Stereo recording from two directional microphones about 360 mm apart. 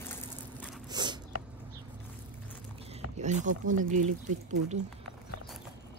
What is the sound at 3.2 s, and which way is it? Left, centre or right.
Speech, centre.